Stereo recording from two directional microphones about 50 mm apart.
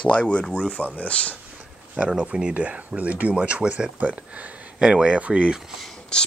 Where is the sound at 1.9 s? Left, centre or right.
Right.